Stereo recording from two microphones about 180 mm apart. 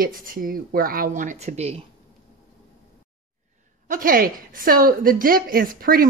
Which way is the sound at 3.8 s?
50° right (ahead or behind).